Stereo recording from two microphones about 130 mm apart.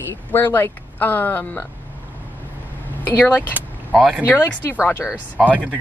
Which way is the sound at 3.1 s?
15° left (ahead or behind).